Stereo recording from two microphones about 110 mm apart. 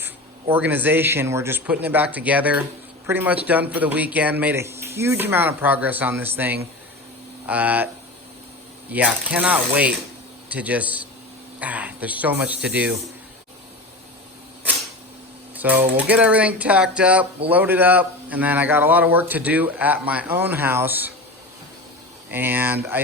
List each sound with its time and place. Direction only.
0.0 s a man's voice: 20° right (ahead or behind)
8.9 s a man's voice: 15° right (ahead or behind)
15.5 s a man's voice: 15° right (ahead or behind)
22.3 s a man's voice: 20° right (ahead or behind)